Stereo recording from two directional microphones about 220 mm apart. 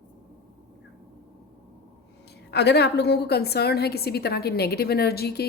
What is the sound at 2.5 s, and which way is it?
A woman's voice, 50° left (ahead or behind).